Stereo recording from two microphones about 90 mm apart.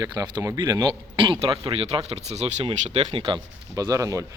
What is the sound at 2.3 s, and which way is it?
Speech, 75° right (ahead or behind).